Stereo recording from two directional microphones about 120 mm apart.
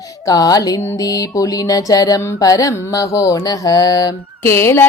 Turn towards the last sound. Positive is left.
turn(degrees=25)  # may be behind; listen again after turning